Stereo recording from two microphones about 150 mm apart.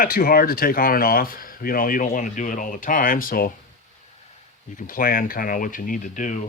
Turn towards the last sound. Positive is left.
turn(degrees=60)  # may be behind; listen again after turning